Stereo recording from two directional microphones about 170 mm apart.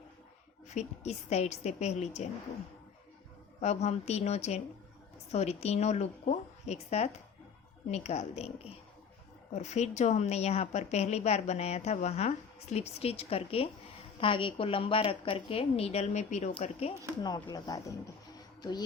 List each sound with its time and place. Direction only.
0.7 s a woman's voice: 40° left (ahead or behind)
3.6 s a woman's voice: 40° left (ahead or behind)
17.2 s speech: 25° left (ahead or behind)